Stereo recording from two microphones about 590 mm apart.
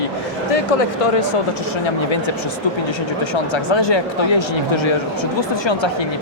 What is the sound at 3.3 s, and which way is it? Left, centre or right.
Speech, left.